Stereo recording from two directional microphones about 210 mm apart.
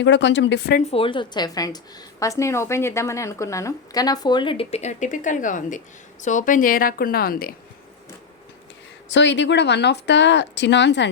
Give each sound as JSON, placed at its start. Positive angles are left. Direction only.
{"t": 0.0, "sound": "speech", "side_deg": 60}
{"t": 0.8, "sound": "a woman's voice", "side_deg": 30}
{"t": 9.0, "sound": "speech", "side_deg": 60}